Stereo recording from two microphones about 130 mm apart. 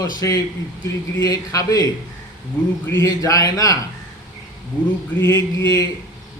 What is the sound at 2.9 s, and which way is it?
Speech, 25° left (ahead or behind).